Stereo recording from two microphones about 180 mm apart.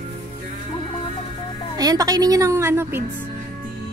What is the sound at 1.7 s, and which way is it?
A woman's voice, 20° right (ahead or behind).